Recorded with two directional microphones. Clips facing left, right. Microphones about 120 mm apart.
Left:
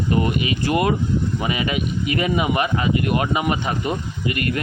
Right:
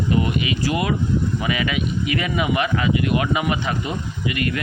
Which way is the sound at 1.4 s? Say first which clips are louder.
Even; 30° left (ahead or behind).